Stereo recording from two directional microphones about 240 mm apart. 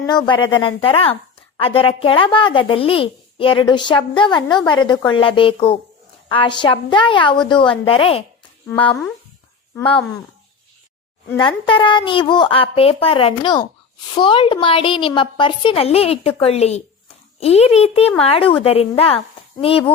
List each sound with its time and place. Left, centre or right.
0.0 s speech: centre
11.3 s speech: centre